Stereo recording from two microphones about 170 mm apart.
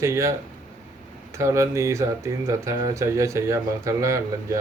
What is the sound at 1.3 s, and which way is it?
Speech, 15° right (ahead or behind).